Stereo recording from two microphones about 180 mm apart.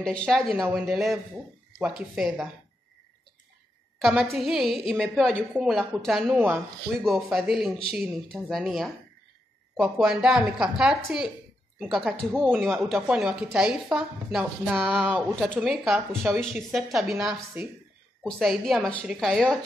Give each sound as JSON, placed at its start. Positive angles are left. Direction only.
{"t": 0.0, "sound": "speech", "side_deg": 5}
{"t": 4.0, "sound": "speech", "side_deg": 0}
{"t": 15.3, "sound": "speech", "side_deg": 5}